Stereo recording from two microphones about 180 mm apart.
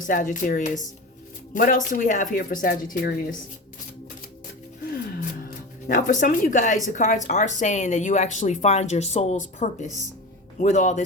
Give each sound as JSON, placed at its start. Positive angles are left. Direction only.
{"t": 0.0, "sound": "speech", "side_deg": 45}
{"t": 4.9, "sound": "music", "side_deg": 55}
{"t": 6.8, "sound": "speech", "side_deg": 45}